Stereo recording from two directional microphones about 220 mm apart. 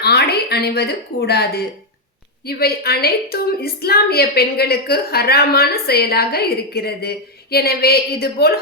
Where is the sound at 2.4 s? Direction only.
45° left (ahead or behind).